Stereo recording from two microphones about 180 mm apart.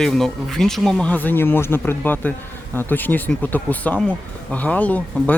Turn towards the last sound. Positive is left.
turn(degrees=10)  # may be behind; listen again after turning